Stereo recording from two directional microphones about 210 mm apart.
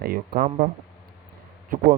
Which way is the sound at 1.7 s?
40° right (ahead or behind).